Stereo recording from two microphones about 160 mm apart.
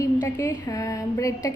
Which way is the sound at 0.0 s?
20° left (ahead or behind).